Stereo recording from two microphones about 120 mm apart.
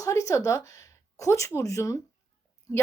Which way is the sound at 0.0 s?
25° left (ahead or behind).